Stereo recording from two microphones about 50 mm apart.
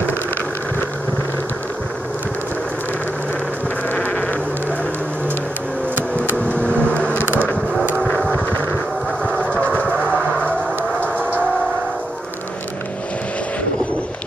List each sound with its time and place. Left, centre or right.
3.9 s a sound: left
6.4 s vehicle: left
9.2 s train: left